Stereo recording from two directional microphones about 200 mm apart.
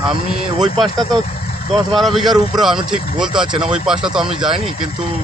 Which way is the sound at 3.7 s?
5° right (ahead or behind).